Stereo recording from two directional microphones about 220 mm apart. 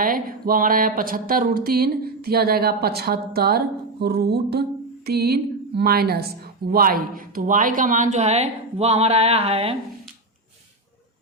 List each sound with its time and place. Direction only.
0.0 s speech: 40° right (ahead or behind)